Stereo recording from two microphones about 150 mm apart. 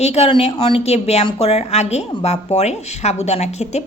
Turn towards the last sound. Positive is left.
turn(degrees=50)  # may be behind; listen again after turning